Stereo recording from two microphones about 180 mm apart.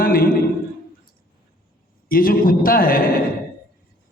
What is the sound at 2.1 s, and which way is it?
A woman's voice, 55° left (ahead or behind).